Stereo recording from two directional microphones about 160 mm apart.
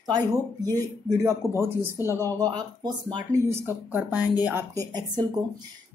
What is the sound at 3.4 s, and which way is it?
A woman's voice, 15° right (ahead or behind).